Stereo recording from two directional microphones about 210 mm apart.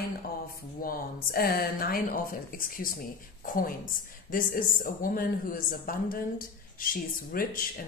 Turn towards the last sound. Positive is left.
turn(degrees=40)  # may be behind; listen again after turning